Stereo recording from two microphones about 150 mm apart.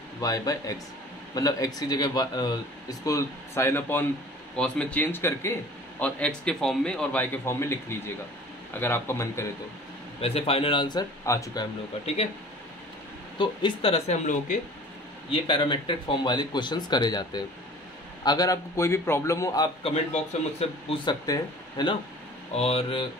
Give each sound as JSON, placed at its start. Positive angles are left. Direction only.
{"t": 0.2, "sound": "a man's voice", "side_deg": 20}
{"t": 10.2, "sound": "speech", "side_deg": 40}
{"t": 13.4, "sound": "speech", "side_deg": 30}
{"t": 15.3, "sound": "speech", "side_deg": 35}
{"t": 19.8, "sound": "speech", "side_deg": 40}
{"t": 22.5, "sound": "speech", "side_deg": 45}